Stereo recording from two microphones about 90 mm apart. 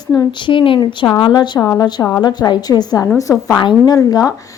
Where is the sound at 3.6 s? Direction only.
45° left (ahead or behind).